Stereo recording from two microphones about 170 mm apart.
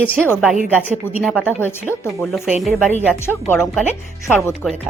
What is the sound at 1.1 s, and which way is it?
Speech, 15° left (ahead or behind).